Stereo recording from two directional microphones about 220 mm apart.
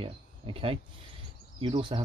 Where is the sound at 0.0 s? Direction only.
25° right (ahead or behind).